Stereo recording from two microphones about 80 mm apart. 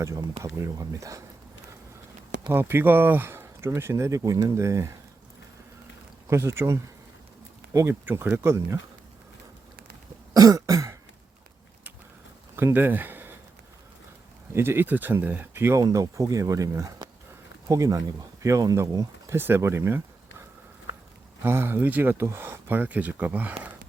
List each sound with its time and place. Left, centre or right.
0.5 s speech: right
2.5 s speech: right
6.2 s speech: right
7.9 s speech: right
10.3 s cough: right
12.5 s speech: right
14.5 s speech: right
15.8 s speech: right
21.4 s speech: right